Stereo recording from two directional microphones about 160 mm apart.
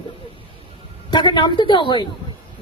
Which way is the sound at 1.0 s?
30° left (ahead or behind).